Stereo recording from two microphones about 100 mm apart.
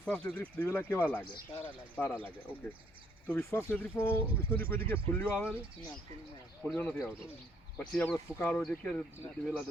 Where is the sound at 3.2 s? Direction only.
20° left (ahead or behind).